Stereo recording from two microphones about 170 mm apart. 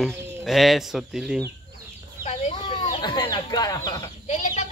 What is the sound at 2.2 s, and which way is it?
Chicken, 40° left (ahead or behind).